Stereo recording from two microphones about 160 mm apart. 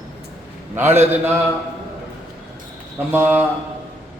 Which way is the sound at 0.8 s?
15° right (ahead or behind).